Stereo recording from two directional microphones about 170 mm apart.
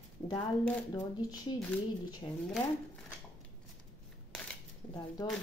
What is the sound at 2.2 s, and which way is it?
Speech, 20° left (ahead or behind).